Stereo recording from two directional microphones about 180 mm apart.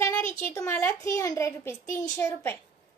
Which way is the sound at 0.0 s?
15° left (ahead or behind).